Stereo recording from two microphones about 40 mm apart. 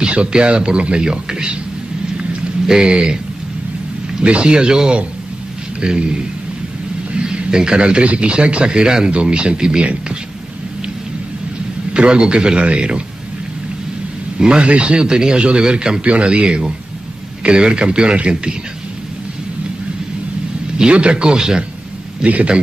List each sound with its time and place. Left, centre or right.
0.0 s speech: right
2.6 s speech: centre
4.2 s a man's voice: right
7.2 s a man's voice: right
11.9 s speech: right
14.4 s speech: right
20.9 s speech: right
22.2 s a man's voice: right